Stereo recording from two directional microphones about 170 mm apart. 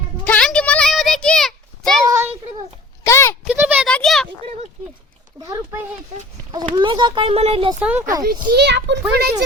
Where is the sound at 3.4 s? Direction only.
10° right (ahead or behind).